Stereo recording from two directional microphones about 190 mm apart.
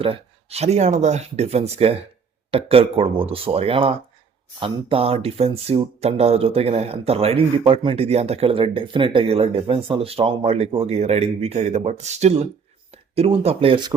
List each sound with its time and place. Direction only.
0.0 s speech: 30° right (ahead or behind)